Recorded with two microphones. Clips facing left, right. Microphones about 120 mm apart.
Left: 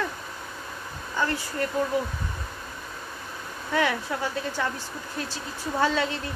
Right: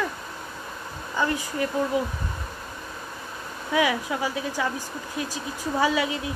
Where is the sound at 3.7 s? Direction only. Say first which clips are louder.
Right 2 dB; 10° right (ahead or behind).